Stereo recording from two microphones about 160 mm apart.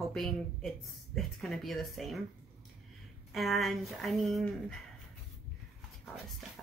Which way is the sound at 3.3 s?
Centre (ahead or behind).